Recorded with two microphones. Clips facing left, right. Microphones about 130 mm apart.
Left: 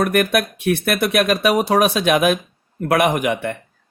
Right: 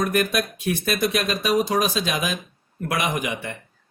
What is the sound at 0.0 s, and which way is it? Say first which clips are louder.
Speech: left 5 dB; 65° left (ahead or behind).